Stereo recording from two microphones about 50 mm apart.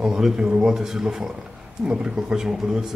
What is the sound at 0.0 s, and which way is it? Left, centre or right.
Speech, centre.